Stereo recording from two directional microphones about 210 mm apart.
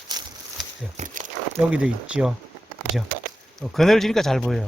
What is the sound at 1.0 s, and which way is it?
Speech, 40° right (ahead or behind).